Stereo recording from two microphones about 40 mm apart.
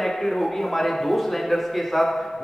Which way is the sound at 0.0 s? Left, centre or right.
Centre.